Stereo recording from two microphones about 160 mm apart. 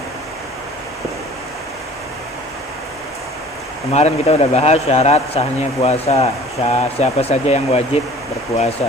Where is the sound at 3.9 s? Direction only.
45° left (ahead or behind).